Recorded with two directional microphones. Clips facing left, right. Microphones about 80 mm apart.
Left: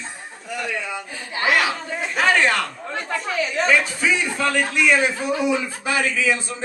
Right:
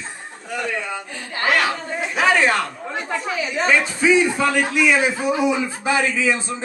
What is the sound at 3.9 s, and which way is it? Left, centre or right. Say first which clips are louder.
A man's voice: right 6 dB; centre.